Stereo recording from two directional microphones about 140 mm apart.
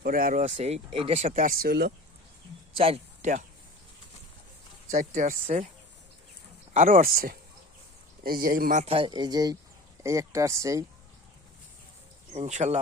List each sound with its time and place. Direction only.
0.0 s speech: 85° right
0.5 s speech: 45° right (ahead or behind)
1.5 s speech: 90° right
2.7 s speech: 45° right (ahead or behind)
3.2 s a sound: 60° right (ahead or behind)
4.9 s speech: 75° right (ahead or behind)
6.7 s speech: 75° right (ahead or behind)
8.8 s speech: 40° right (ahead or behind); by 10.8 s 20° right (ahead or behind)
12.3 s speech: 55° right (ahead or behind)